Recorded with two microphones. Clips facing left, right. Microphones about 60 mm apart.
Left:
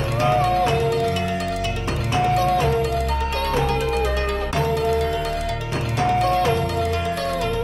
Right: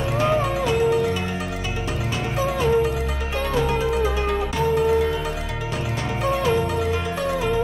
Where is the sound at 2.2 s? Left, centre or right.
Centre.